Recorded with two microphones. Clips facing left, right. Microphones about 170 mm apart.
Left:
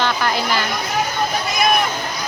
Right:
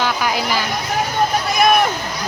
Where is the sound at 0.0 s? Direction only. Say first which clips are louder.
Even; 10° right (ahead or behind).